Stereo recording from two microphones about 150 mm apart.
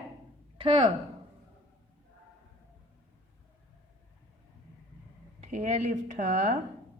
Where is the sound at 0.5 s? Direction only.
35° right (ahead or behind).